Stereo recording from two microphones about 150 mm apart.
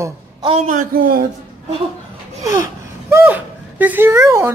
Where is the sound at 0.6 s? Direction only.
65° right (ahead or behind).